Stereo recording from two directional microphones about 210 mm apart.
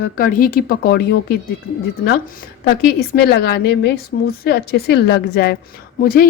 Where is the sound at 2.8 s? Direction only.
50° left (ahead or behind).